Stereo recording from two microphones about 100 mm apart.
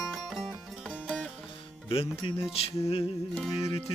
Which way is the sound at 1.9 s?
70° left (ahead or behind).